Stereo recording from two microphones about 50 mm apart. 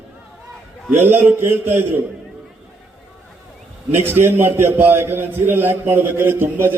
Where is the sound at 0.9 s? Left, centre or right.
Right.